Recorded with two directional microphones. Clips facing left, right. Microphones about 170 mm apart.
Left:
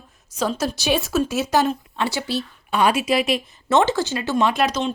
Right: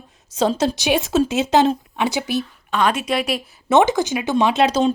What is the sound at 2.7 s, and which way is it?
Speech, 10° left (ahead or behind).